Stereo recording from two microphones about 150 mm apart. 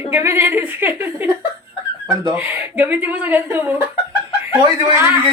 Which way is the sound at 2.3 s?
10° right (ahead or behind).